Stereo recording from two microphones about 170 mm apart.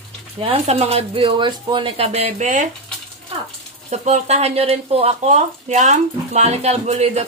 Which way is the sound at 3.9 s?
40° right (ahead or behind).